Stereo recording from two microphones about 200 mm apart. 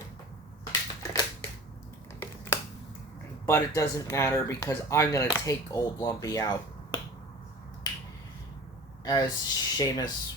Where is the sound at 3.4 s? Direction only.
15° left (ahead or behind).